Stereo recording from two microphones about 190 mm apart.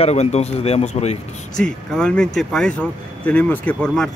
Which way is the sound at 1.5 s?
5° left (ahead or behind).